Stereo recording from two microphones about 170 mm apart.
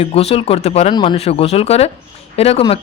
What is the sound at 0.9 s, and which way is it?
Speech, 25° left (ahead or behind).